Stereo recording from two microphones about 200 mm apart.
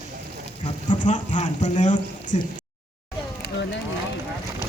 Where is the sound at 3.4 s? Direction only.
60° left (ahead or behind).